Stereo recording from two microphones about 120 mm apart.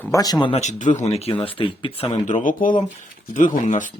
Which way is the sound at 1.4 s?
50° left (ahead or behind).